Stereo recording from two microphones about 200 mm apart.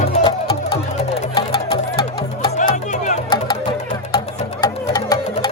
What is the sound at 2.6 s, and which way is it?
Music, 35° left (ahead or behind).